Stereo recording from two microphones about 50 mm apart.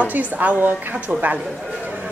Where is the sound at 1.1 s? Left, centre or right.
Right.